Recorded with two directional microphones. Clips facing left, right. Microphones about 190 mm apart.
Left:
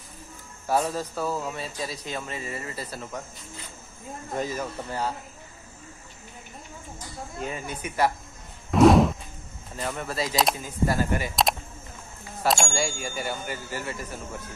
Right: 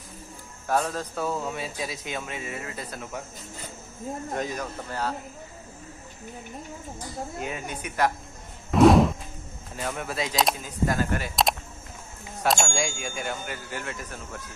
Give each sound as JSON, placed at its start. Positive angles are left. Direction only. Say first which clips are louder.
{"t": 0.7, "sound": "a man's voice", "louder": "left 1 dB", "side_deg": 10}
{"t": 4.4, "sound": "speech", "louder": "left 1 dB", "side_deg": 5}
{"t": 7.3, "sound": "a man's voice", "louder": "left 4 dB", "side_deg": -5}
{"t": 8.7, "sound": "a sound", "louder": "even", "side_deg": 0}
{"t": 9.8, "sound": "a man's voice", "louder": "left 1 dB", "side_deg": 0}
{"t": 12.4, "sound": "a man's voice", "louder": "even", "side_deg": 5}